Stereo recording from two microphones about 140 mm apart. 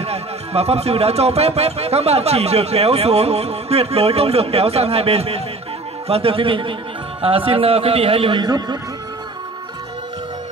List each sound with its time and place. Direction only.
0.0 s a man's voice: 45° right (ahead or behind); by 8.7 s 30° right (ahead or behind)